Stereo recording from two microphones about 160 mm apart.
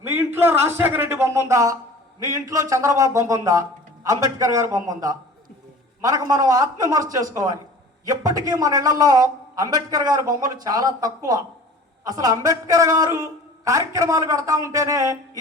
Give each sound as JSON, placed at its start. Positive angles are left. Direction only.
{"t": 0.0, "sound": "a man's voice", "side_deg": -15}